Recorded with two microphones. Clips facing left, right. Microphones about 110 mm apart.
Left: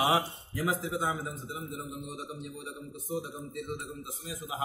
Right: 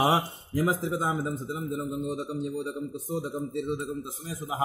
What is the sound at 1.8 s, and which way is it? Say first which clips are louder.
Speech: right 9 dB; 20° right (ahead or behind).